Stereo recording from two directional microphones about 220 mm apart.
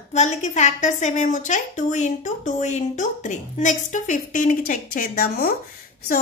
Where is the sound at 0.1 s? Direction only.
30° left (ahead or behind).